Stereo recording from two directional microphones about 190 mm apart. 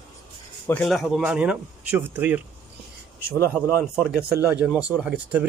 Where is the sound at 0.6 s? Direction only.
5° left (ahead or behind).